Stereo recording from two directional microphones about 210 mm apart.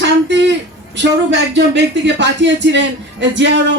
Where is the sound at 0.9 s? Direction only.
55° right (ahead or behind).